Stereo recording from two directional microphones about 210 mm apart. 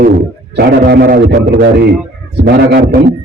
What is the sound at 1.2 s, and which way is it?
Speech, 70° right (ahead or behind).